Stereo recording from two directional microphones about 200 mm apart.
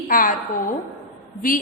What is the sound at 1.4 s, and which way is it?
Speech, 45° left (ahead or behind).